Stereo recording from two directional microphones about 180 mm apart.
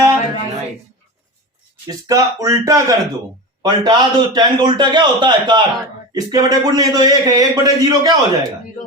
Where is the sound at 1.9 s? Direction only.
20° right (ahead or behind).